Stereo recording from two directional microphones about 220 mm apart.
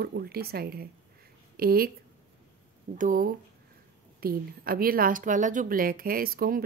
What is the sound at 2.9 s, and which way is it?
A woman's voice, 35° right (ahead or behind).